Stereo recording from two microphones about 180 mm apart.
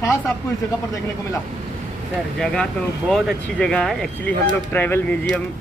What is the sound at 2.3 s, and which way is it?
Speech, 5° left (ahead or behind).